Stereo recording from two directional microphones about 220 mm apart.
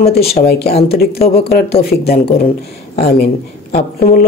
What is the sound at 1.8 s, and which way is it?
Speech, 45° left (ahead or behind).